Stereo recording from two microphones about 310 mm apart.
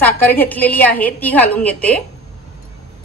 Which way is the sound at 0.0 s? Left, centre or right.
Centre.